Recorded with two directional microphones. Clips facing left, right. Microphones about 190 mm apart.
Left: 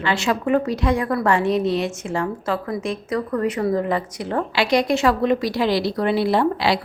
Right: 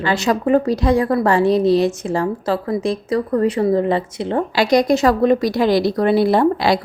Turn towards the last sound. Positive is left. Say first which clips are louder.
# right 4 dB
turn(degrees=-45)  # may be behind; listen again after turning